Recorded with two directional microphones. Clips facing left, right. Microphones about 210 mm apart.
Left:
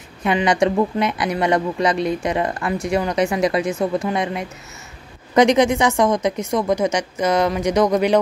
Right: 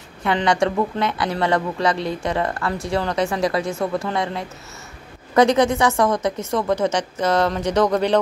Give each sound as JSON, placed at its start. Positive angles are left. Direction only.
{"t": 0.2, "sound": "speech", "side_deg": 20}